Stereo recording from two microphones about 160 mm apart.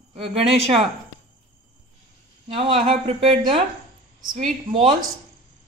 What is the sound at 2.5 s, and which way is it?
Speech, 35° right (ahead or behind).